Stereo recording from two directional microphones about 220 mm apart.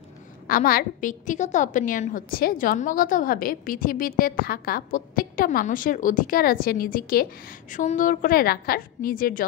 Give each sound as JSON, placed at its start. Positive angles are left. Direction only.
{"t": 0.5, "sound": "a woman's voice", "side_deg": 40}